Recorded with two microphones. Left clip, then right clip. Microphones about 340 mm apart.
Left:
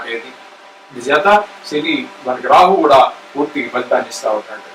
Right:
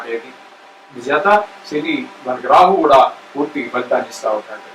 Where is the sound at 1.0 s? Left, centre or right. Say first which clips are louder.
Left 2 dB; centre.